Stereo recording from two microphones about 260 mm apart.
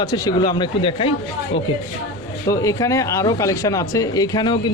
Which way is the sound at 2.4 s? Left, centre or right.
Centre.